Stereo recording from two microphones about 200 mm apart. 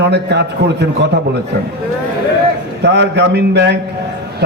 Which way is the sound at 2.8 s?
60° right (ahead or behind).